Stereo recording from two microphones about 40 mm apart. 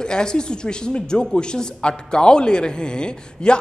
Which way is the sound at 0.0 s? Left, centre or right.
Centre.